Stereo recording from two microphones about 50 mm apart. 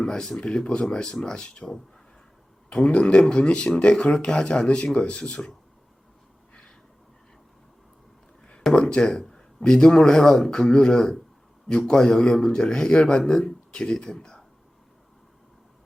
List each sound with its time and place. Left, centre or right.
0.0 s speech: centre
2.6 s speech: left
8.7 s speech: centre